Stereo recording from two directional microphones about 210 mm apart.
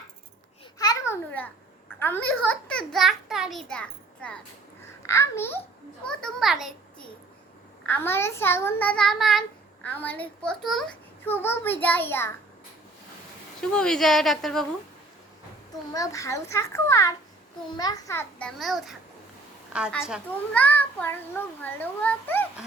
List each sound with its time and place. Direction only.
0.8 s babbling: 15° left (ahead or behind)
2.0 s a sound: 10° left (ahead or behind)
2.5 s a child's voice: 5° left (ahead or behind)
7.9 s a child's voice: 10° left (ahead or behind)
13.6 s a child's voice: 5° left (ahead or behind)
15.9 s a child's voice: 15° left (ahead or behind); by 18.9 s centre (ahead or behind)
20.5 s a child's voice: 10° left (ahead or behind)